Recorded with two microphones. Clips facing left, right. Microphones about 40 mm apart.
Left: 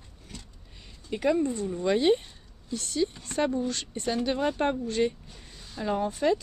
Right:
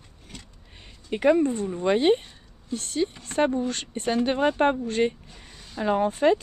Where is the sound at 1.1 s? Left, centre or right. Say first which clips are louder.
Right 5 dB; right.